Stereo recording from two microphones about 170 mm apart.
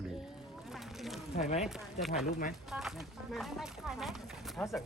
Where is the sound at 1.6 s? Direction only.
Centre (ahead or behind).